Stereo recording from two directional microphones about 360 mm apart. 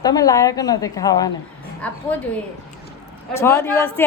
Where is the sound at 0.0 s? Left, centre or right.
Centre.